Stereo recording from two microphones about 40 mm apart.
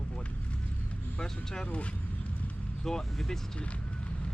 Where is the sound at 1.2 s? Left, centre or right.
Centre.